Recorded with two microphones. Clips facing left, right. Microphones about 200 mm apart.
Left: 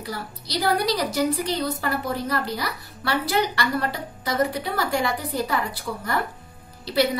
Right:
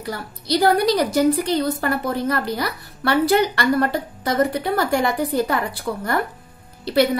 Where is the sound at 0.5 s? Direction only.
55° right (ahead or behind).